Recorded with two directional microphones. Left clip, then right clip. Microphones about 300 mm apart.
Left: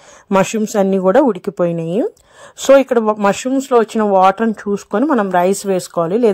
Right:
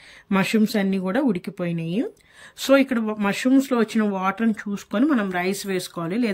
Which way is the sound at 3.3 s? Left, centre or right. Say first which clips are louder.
Left 4 dB; centre.